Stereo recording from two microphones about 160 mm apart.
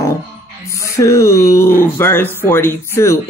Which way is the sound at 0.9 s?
20° left (ahead or behind).